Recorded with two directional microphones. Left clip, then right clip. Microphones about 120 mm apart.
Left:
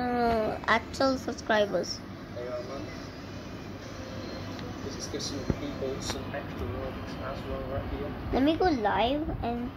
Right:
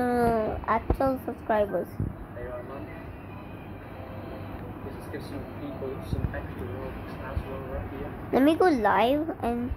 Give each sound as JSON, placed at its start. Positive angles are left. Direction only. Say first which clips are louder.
{"t": 0.0, "sound": "cat", "louder": "right 3 dB", "side_deg": -30}
{"t": 0.4, "sound": "a woman's voice", "louder": "even", "side_deg": -10}
{"t": 8.3, "sound": "a woman's voice", "louder": "right 4 dB", "side_deg": -45}